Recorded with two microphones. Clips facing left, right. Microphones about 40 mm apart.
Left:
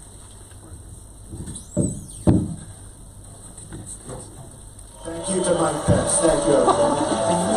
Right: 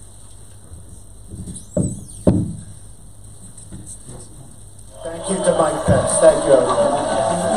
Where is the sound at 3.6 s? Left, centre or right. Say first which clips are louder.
Left 3 dB; left.